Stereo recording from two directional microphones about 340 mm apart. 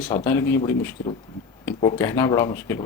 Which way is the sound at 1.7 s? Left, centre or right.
Centre.